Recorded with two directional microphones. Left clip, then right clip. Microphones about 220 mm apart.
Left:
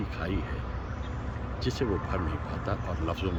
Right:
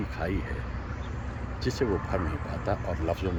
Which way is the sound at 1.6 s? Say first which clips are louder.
Right 2 dB; 10° right (ahead or behind).